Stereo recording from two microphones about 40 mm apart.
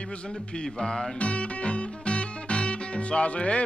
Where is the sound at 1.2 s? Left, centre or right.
Left.